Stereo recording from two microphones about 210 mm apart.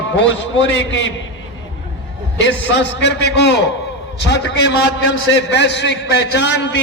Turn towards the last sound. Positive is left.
turn(degrees=55)  # may be behind; listen again after turning